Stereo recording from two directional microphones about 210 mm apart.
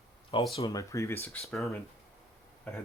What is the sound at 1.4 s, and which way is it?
Speech, centre (ahead or behind).